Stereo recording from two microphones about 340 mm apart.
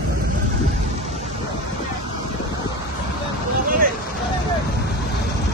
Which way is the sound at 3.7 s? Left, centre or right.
Right.